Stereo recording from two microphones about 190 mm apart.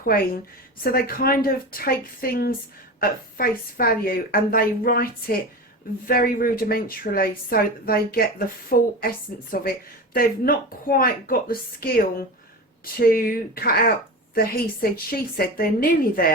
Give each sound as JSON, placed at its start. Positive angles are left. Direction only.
{"t": 0.8, "sound": "a woman's voice", "side_deg": 50}